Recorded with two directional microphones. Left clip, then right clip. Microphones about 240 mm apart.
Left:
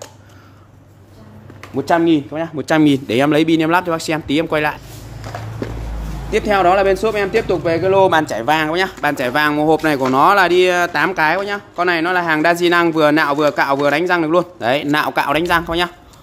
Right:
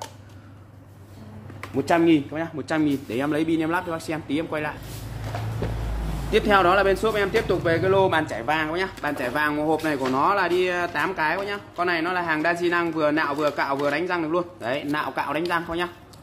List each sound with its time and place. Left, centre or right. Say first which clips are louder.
1.8 s speech: left 5 dB; left
6.3 s speech: left 5 dB; centre; by 15.9 s left